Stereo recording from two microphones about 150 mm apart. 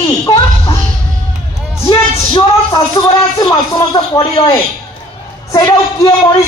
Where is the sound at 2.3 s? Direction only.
25° left (ahead or behind).